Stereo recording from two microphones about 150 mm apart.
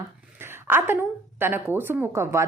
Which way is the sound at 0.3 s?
15° right (ahead or behind).